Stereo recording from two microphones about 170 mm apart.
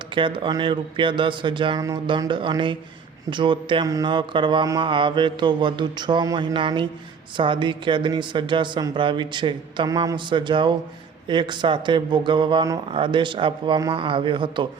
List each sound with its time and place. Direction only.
0.1 s speech: 30° right (ahead or behind)